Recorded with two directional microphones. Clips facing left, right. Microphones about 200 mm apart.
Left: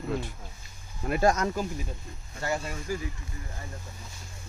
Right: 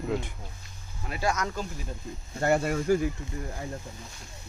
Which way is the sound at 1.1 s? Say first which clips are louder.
Left 6 dB; 45° left (ahead or behind).